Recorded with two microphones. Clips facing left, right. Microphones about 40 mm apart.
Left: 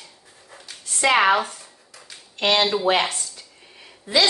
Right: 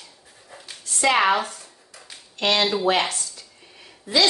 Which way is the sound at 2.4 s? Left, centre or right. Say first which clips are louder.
Left 1 dB; left.